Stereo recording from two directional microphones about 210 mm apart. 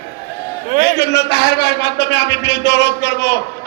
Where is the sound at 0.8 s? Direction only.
50° left (ahead or behind).